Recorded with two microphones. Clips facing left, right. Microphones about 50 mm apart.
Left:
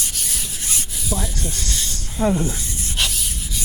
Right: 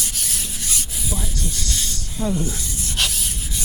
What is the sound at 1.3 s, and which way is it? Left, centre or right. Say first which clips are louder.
Speech: even; left.